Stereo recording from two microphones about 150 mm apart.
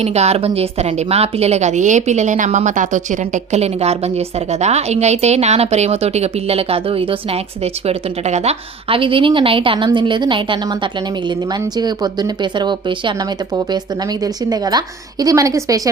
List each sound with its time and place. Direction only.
0.0 s a woman's voice: 45° right (ahead or behind); by 15.9 s 20° right (ahead or behind)